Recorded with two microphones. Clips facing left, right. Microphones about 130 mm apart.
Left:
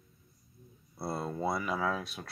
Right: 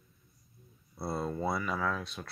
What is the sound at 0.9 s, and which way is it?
Speech, centre (ahead or behind).